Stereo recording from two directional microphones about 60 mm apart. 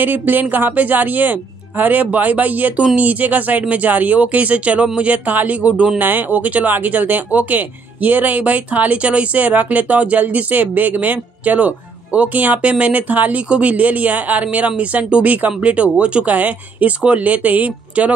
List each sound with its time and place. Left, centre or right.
0.0 s speech: right